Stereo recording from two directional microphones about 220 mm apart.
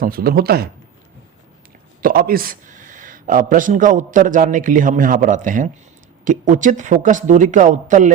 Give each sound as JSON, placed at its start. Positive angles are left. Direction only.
{"t": 0.0, "sound": "speech", "side_deg": -40}
{"t": 2.0, "sound": "speech", "side_deg": -40}